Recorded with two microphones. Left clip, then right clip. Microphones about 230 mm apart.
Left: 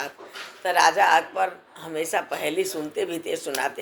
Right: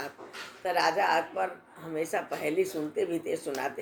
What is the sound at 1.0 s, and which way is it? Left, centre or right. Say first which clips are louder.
Speech: left 8 dB; left.